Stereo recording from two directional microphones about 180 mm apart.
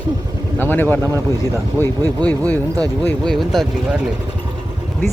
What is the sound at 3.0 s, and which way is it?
Speech, 5° left (ahead or behind).